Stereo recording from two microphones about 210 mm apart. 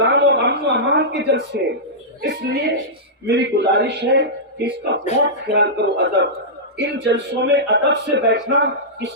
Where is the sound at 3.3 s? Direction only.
55° right (ahead or behind).